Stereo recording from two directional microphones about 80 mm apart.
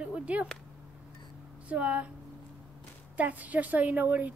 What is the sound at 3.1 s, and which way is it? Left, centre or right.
A woman's voice, centre.